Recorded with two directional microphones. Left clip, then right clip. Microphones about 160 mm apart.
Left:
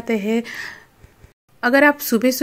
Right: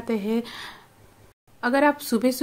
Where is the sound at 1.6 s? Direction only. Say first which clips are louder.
Left 6 dB; 25° left (ahead or behind).